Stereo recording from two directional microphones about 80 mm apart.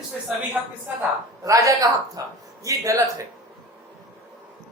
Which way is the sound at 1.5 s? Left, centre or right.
Right.